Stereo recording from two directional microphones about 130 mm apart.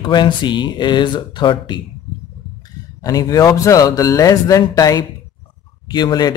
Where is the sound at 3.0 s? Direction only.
25° left (ahead or behind).